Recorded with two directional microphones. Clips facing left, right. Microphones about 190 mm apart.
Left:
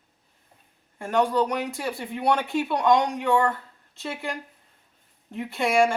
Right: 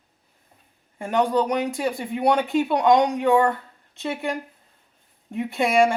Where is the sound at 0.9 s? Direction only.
15° right (ahead or behind).